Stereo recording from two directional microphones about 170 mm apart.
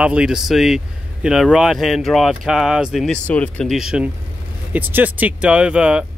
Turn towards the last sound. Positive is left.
turn(degrees=-5)  # may be behind; listen again after turning